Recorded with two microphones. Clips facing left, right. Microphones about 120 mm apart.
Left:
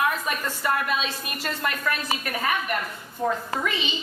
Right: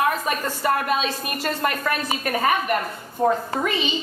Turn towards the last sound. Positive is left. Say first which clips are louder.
# right 4 dB
turn(degrees=-40)  # may be behind; listen again after turning